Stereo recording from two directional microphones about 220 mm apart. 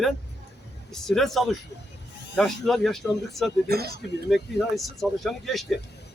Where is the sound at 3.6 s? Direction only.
45° right (ahead or behind).